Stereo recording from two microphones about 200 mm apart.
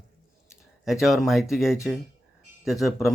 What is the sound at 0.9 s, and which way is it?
Speech, centre (ahead or behind).